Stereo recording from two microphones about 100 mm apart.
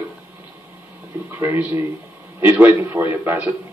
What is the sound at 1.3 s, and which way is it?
A man's voice, 20° right (ahead or behind).